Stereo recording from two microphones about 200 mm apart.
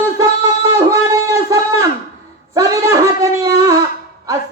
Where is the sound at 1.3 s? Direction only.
15° right (ahead or behind).